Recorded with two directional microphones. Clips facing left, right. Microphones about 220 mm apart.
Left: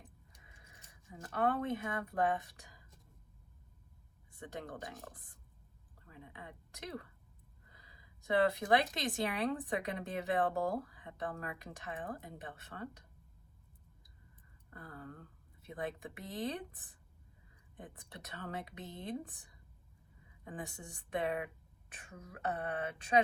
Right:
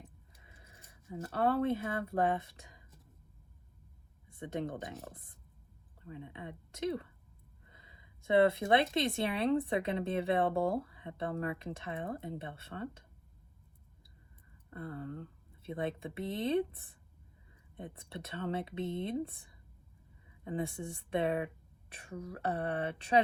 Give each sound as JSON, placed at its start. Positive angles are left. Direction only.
{"t": 0.4, "sound": "speech", "side_deg": -30}
{"t": 4.3, "sound": "speech", "side_deg": -25}
{"t": 6.1, "sound": "a woman's voice", "side_deg": -25}
{"t": 14.7, "sound": "a woman's voice", "side_deg": -25}